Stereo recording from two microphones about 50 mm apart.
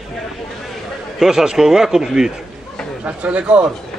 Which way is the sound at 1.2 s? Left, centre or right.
Centre.